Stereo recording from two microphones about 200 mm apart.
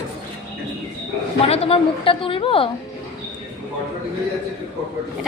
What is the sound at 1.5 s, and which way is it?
A woman's voice, 25° left (ahead or behind).